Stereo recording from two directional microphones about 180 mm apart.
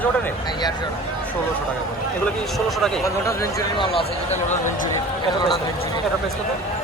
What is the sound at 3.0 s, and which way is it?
Speech, 15° left (ahead or behind).